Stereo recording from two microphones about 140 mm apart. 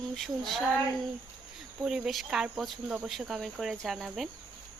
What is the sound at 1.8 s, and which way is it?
Speech, 5° right (ahead or behind).